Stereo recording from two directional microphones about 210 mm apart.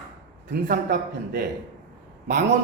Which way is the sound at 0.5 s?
45° right (ahead or behind).